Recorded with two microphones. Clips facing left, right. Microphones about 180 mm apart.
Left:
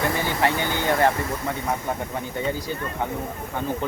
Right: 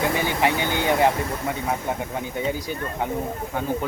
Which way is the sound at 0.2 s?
15° right (ahead or behind).